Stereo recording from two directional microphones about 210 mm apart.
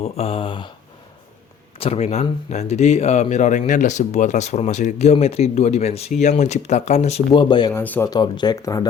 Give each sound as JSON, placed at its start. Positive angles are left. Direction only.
{"t": 0.0, "sound": "speech", "side_deg": 30}
{"t": 1.8, "sound": "speech", "side_deg": 30}
{"t": 7.3, "sound": "speech", "side_deg": 20}
{"t": 7.7, "sound": "speech", "side_deg": 10}